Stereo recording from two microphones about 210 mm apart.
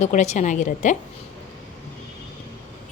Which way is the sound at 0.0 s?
35° left (ahead or behind).